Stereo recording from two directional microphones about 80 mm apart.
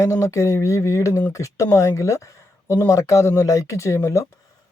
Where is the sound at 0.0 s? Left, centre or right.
Left.